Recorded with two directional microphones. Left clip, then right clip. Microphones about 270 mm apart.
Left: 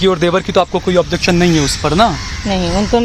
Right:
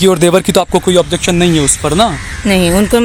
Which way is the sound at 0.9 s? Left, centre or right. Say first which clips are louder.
Right 2 dB; centre.